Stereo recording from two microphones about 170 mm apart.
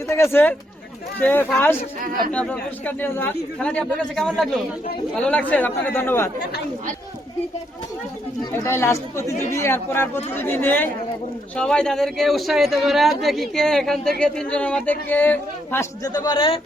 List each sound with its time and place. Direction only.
0.1 s speech: 15° left (ahead or behind)
2.0 s speech: 55° right (ahead or behind)
2.3 s speech: 10° left (ahead or behind)
8.6 s a man's voice: 15° left (ahead or behind)